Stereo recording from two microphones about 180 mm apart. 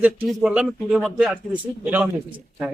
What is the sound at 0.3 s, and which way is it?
A man's voice, 5° right (ahead or behind).